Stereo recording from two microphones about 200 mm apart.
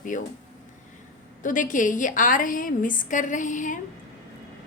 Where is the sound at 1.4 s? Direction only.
40° left (ahead or behind).